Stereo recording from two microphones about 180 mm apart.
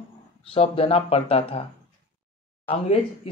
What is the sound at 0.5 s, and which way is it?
Speech, 35° left (ahead or behind).